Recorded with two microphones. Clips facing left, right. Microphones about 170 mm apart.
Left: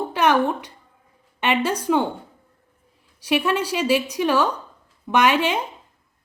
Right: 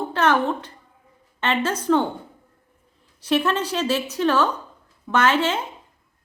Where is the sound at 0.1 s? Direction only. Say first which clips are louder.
Left 1 dB; 15° left (ahead or behind).